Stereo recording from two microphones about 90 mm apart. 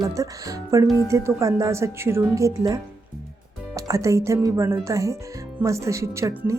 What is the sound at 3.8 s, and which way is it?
Speech, 35° right (ahead or behind).